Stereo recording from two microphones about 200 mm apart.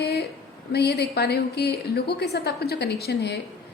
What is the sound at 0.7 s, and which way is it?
A woman's voice, 55° left (ahead or behind).